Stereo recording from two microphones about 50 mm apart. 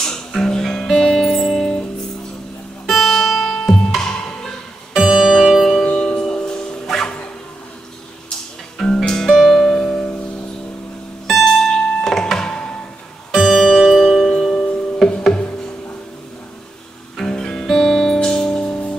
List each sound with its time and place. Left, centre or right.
0.0 s music: centre
2.9 s music: centre
4.9 s music: centre
8.7 s music: centre
9.8 s music: left
11.2 s music: centre
13.3 s music: centre
17.2 s music: centre